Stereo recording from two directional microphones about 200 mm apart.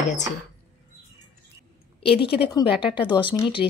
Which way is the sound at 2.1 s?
25° left (ahead or behind).